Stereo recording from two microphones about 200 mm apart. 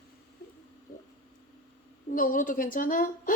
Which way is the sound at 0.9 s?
45° left (ahead or behind).